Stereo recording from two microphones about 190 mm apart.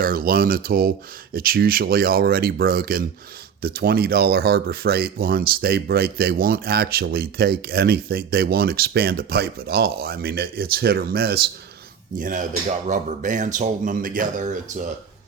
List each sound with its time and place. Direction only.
0.0 s speech: 50° right (ahead or behind)
12.1 s speech: 45° right (ahead or behind)